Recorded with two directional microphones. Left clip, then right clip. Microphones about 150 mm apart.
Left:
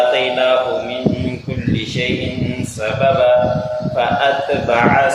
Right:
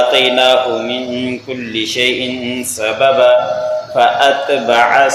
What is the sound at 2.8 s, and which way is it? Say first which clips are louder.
Mantra: right 4 dB; 40° right (ahead or behind).